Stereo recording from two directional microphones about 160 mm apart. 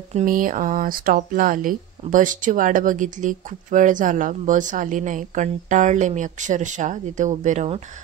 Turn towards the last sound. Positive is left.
turn(degrees=-50)  # may be behind; listen again after turning